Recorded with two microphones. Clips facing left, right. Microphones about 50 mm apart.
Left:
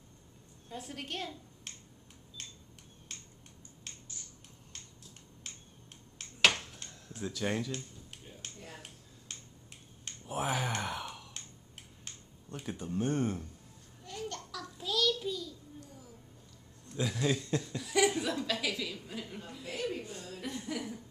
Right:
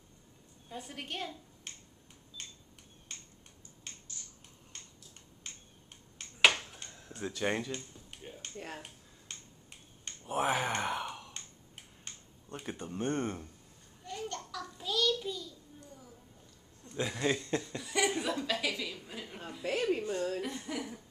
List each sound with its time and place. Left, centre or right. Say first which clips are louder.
0.7 s a woman's voice: left 1 dB; centre
2.4 s a sound: even; centre
3.1 s finger snapping: even; centre
5.4 s tick-tock: even; centre
6.1 s finger snapping: right 2 dB; centre
7.0 s speech: right 1 dB; right
8.4 s a sound: right 3 dB; centre
9.3 s finger snapping: even; centre
12.7 s speech: left 2 dB; centre
14.0 s a sound: right 1 dB; centre
16.9 s speech: even; centre
19.6 s speech: right 6 dB; right
20.4 s a sound: even; centre